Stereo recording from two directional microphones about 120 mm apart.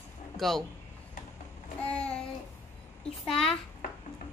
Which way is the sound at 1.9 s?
10° left (ahead or behind).